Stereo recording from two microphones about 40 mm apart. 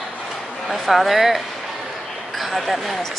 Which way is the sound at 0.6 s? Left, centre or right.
Centre.